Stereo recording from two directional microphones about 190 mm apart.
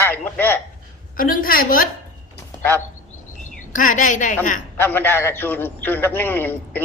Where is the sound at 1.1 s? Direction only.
50° left (ahead or behind).